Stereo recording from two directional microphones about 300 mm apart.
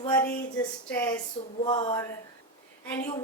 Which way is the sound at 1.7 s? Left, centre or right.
Centre.